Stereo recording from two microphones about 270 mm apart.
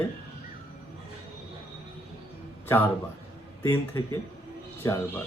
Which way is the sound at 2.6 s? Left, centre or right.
Centre.